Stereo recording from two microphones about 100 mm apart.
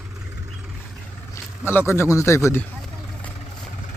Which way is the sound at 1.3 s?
25° left (ahead or behind).